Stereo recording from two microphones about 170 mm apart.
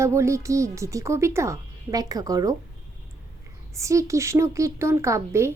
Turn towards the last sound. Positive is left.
turn(degrees=-15)  # may be behind; listen again after turning